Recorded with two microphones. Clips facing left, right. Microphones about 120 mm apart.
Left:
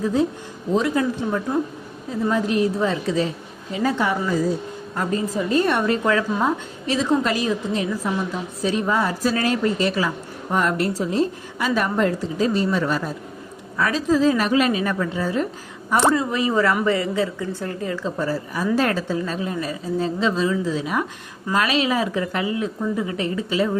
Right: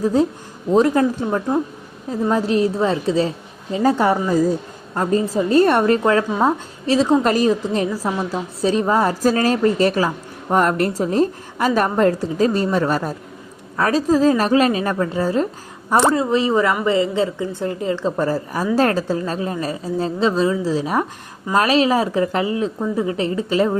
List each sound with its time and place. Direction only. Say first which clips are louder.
0.0 s a woman's voice: right 3 dB; 40° right (ahead or behind)
2.3 s a woman's voice: right 3 dB; 30° right (ahead or behind); by 6.0 s 45° right (ahead or behind)
6.0 s a woman's voice: right 4 dB; 35° right (ahead or behind)
18.0 s a woman's voice: right 4 dB; 45° right (ahead or behind)
23.5 s a woman's voice: right 4 dB; 45° right (ahead or behind)